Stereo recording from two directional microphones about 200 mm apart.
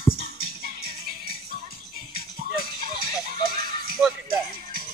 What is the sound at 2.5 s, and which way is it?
Music, 50° right (ahead or behind).